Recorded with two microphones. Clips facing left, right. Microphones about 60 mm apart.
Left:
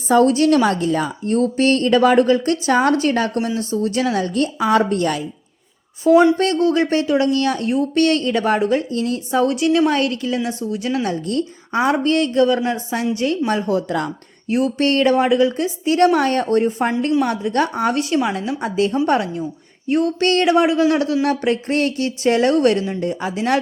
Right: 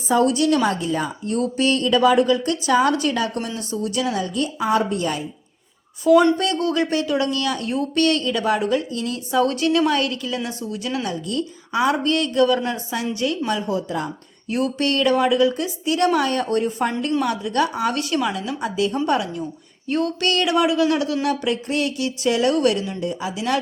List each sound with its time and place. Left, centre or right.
0.1 s a woman's voice: left
6.3 s a woman's voice: left
6.6 s a woman's voice: left
9.5 s a woman's voice: left
9.9 s a woman's voice: left
13.5 s a woman's voice: left
14.5 s a woman's voice: left
17.2 s a woman's voice: left
19.9 s a woman's voice: left